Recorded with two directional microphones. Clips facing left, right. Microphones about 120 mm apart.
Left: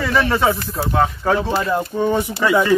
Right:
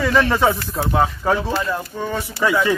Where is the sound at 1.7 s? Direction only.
20° left (ahead or behind).